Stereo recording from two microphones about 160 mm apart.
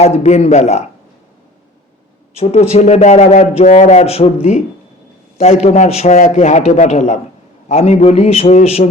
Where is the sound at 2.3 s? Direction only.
40° left (ahead or behind).